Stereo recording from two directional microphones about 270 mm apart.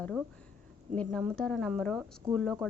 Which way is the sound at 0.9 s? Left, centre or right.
Centre.